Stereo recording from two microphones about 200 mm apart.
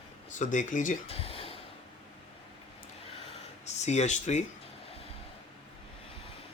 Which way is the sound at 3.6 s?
35° left (ahead or behind).